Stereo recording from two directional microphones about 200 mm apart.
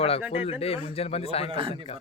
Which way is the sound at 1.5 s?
25° right (ahead or behind).